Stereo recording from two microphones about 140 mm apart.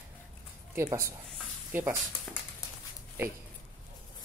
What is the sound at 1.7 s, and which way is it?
Speech, 15° right (ahead or behind).